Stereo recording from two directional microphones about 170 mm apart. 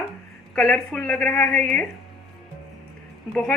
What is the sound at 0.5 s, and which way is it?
A woman's voice, 5° left (ahead or behind).